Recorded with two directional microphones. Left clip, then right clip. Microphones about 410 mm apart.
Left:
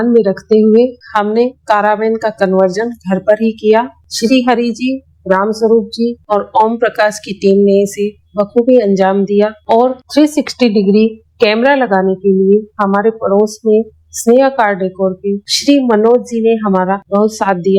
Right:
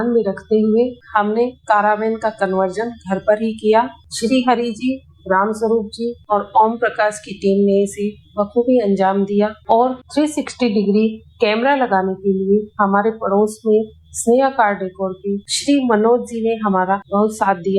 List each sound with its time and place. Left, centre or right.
0.0 s a woman's voice: left
7.5 s music: left
7.9 s a woman's voice: left